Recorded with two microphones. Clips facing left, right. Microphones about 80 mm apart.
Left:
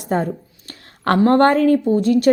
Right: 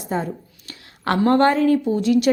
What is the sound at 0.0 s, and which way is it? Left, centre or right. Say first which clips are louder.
Speech: left 4 dB; left.